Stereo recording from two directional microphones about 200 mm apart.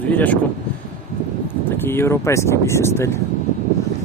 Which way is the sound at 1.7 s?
10° left (ahead or behind).